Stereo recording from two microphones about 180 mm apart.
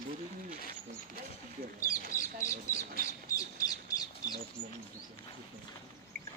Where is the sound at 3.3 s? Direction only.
20° left (ahead or behind).